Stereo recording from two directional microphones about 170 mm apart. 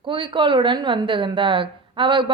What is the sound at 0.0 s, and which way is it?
A woman's voice, 30° right (ahead or behind).